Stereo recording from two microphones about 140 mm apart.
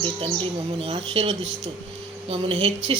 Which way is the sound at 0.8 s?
40° right (ahead or behind).